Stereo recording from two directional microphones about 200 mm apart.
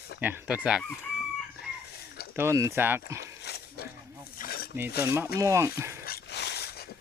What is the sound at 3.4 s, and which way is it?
Dog, 55° left (ahead or behind).